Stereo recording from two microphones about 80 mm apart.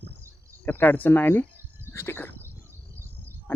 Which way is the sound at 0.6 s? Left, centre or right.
Left.